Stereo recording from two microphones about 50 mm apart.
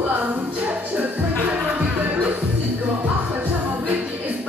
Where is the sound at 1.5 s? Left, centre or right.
Right.